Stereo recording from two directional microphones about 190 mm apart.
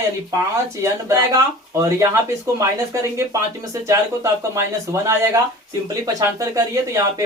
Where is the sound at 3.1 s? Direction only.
15° right (ahead or behind).